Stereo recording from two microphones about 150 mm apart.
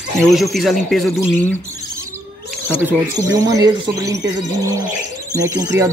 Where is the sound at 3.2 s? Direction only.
25° right (ahead or behind).